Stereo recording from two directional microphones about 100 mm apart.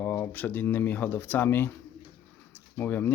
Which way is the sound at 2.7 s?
20° left (ahead or behind).